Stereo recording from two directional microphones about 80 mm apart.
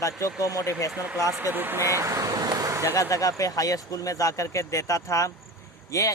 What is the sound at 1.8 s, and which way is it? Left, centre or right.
Vehicle, right.